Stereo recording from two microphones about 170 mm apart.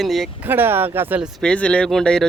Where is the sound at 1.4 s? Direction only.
5° left (ahead or behind).